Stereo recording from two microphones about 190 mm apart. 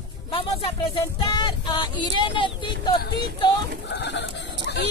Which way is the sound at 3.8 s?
65° left (ahead or behind).